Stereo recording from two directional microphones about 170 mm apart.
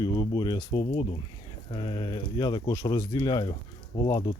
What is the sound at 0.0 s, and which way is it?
Speech, 25° left (ahead or behind).